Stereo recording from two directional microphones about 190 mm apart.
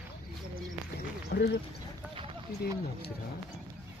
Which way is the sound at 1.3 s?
60° left (ahead or behind).